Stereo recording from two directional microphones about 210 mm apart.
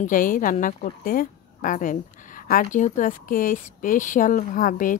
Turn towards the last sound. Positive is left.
turn(degrees=40)  # may be behind; listen again after turning